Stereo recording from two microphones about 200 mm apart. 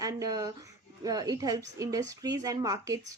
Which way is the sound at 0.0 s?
15° right (ahead or behind).